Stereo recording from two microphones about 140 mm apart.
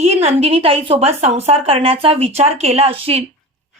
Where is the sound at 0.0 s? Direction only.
50° right (ahead or behind).